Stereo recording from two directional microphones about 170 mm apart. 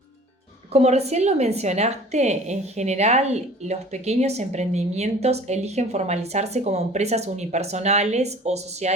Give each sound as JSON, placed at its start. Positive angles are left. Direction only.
{"t": 0.7, "sound": "a woman's voice", "side_deg": -40}